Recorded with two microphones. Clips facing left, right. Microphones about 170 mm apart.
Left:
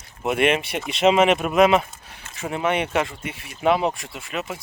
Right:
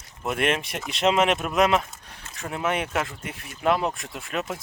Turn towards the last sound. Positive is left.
turn(degrees=0)  # may be behind; listen again after turning